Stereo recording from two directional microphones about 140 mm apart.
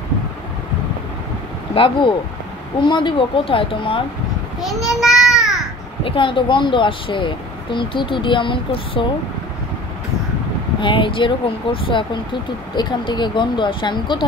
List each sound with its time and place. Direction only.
1.7 s speech: 35° left (ahead or behind)
4.6 s a child's voice: centre (ahead or behind)
5.0 s a sound: 5° right (ahead or behind)
6.0 s speech: 40° left (ahead or behind)
10.8 s speech: 35° left (ahead or behind)